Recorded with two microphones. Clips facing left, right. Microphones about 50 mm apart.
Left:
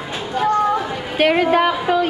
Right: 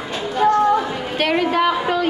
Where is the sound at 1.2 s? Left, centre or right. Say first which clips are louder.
Left 3 dB; centre.